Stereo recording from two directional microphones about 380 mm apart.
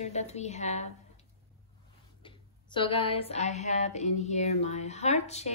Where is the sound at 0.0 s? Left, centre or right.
Centre.